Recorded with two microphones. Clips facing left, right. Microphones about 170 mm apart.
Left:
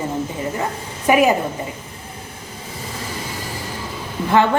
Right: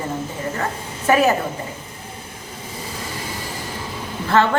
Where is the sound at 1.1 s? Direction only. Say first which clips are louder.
Left 1 dB; 15° left (ahead or behind).